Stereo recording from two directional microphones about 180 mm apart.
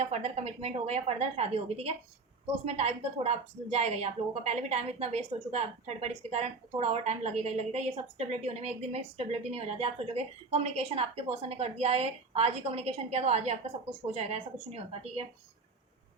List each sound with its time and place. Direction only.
0.0 s a woman's voice: 35° right (ahead or behind)